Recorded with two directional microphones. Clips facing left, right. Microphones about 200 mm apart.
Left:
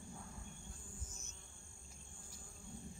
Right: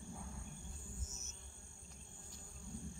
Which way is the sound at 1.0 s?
25° right (ahead or behind).